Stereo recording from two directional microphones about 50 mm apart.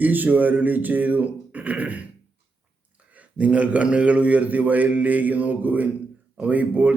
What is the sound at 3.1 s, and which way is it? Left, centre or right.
A man's voice, right.